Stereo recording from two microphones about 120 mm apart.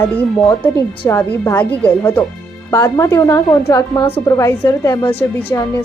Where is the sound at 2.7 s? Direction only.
25° left (ahead or behind).